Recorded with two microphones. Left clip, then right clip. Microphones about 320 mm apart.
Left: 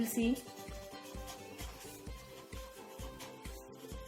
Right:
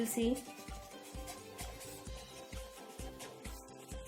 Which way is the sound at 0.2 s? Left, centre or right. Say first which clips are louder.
Even; left.